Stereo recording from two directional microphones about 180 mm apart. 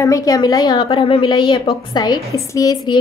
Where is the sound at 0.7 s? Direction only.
30° left (ahead or behind).